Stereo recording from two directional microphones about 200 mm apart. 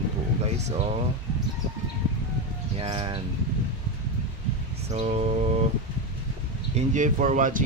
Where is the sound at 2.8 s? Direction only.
25° right (ahead or behind).